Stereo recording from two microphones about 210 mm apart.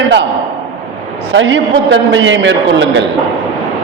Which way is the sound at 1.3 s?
60° right (ahead or behind).